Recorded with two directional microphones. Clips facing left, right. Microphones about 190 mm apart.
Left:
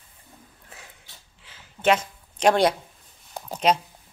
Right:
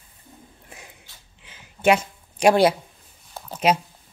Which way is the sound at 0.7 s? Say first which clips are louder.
Right 1 dB; 15° right (ahead or behind).